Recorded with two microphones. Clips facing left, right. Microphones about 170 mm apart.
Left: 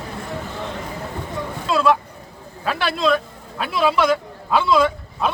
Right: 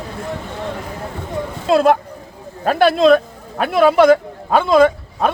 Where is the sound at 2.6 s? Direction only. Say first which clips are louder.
Right 8 dB; 45° right (ahead or behind).